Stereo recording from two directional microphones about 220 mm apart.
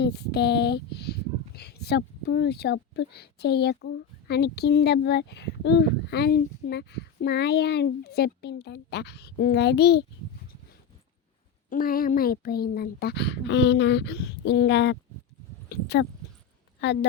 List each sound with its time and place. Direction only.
0.0 s speech: 45° left (ahead or behind)
11.7 s speech: 40° left (ahead or behind)